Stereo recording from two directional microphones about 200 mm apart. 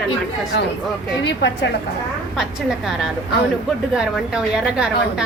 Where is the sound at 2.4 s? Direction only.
Centre (ahead or behind).